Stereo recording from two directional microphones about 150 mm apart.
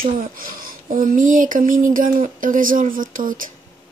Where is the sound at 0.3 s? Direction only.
70° right (ahead or behind).